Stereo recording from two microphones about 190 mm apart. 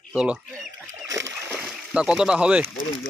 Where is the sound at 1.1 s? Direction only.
15° right (ahead or behind).